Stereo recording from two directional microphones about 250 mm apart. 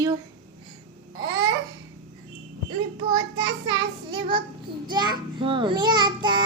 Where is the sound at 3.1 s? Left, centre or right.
Centre.